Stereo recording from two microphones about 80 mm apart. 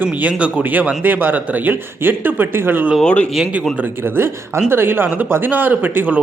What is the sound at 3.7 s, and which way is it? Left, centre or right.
A man's voice, right.